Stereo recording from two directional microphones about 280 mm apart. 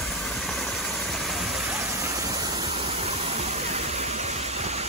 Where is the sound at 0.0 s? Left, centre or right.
Centre.